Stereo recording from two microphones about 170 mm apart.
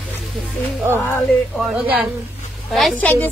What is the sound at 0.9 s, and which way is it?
Speech, 10° left (ahead or behind).